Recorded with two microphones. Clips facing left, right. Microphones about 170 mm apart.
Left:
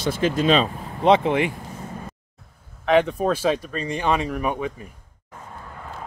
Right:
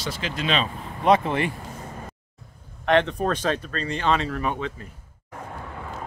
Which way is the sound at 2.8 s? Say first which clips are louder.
Left 2 dB; 5° left (ahead or behind).